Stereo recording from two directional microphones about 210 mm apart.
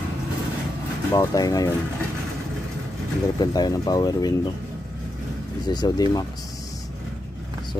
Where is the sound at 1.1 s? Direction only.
15° left (ahead or behind).